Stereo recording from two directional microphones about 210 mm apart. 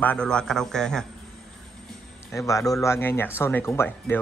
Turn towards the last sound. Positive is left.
turn(degrees=10)  # may be behind; listen again after turning